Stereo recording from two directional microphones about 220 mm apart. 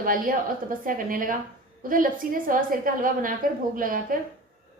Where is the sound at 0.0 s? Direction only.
40° right (ahead or behind).